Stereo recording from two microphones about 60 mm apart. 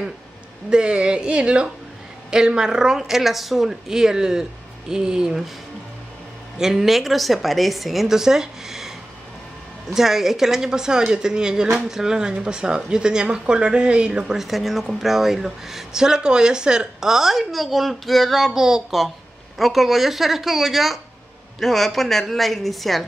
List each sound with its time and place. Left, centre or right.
0.7 s speech: centre
6.6 s a woman's voice: centre
9.9 s a woman's voice: centre